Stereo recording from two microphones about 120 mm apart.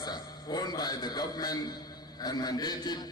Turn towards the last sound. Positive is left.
turn(degrees=35)  # may be behind; listen again after turning